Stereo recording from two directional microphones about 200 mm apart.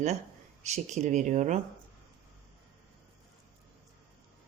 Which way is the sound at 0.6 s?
35° right (ahead or behind).